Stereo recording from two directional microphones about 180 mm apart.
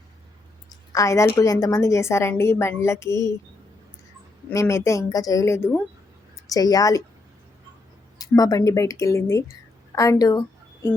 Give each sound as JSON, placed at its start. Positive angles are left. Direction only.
{"t": 0.9, "sound": "a woman's voice", "side_deg": 15}
{"t": 4.4, "sound": "a woman's voice", "side_deg": 15}
{"t": 8.2, "sound": "a woman's voice", "side_deg": 20}